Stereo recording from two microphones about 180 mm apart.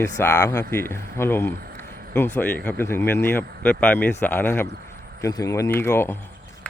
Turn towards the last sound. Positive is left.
turn(degrees=15)  # may be behind; listen again after turning